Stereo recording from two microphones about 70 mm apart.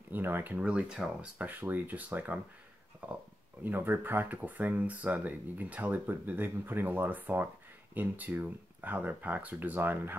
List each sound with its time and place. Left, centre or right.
0.1 s speech: right; by 1.3 s centre
1.4 s speech: right